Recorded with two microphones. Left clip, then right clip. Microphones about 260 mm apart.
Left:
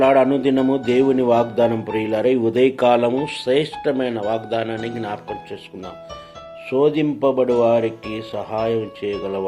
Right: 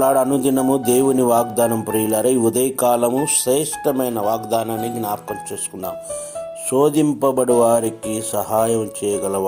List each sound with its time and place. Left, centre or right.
0.0 s speech: right
6.7 s speech: right